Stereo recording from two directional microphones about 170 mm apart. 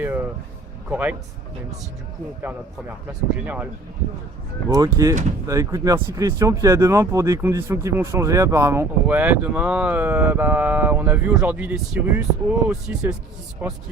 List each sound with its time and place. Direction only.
0.0 s speech: 10° right (ahead or behind)
3.1 s speech: 5° right (ahead or behind)
4.7 s speech: 20° right (ahead or behind)